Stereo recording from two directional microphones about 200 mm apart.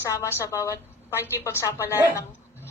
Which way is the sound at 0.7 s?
10° right (ahead or behind).